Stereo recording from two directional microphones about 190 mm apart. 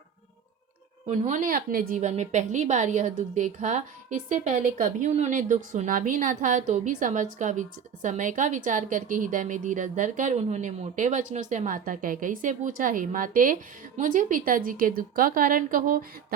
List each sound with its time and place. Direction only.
1.0 s a woman's voice: 40° right (ahead or behind)